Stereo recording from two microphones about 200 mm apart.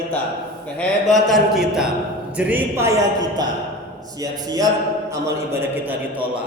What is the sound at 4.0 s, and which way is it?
A man's voice, 20° right (ahead or behind).